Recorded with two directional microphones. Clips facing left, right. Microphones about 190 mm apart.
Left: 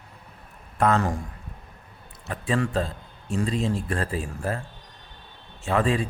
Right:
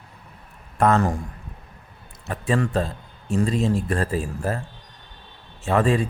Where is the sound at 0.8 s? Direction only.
45° right (ahead or behind).